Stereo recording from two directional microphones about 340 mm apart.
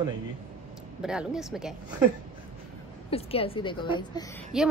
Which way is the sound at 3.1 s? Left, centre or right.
Centre.